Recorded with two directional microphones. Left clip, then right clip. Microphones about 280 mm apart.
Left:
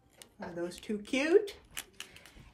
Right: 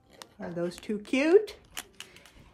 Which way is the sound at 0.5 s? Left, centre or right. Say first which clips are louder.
Right 5 dB; right.